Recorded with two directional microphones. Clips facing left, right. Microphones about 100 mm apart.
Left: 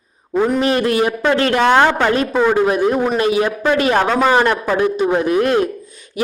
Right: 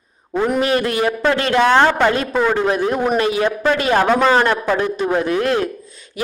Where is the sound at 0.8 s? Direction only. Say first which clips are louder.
Left 3 dB; 25° left (ahead or behind).